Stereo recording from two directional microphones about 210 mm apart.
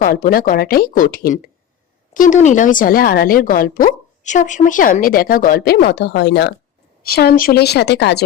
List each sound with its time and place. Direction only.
0.0 s speech: 45° left (ahead or behind)